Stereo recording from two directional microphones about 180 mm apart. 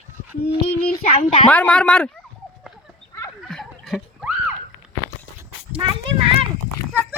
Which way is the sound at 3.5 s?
Centre (ahead or behind).